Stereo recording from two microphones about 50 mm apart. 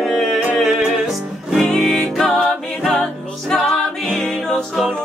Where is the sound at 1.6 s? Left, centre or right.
Centre.